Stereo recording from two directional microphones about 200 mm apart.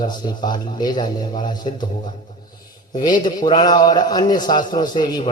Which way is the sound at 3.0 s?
20° left (ahead or behind).